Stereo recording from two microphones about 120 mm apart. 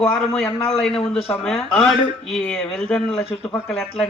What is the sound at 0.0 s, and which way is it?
A man's voice, 10° left (ahead or behind).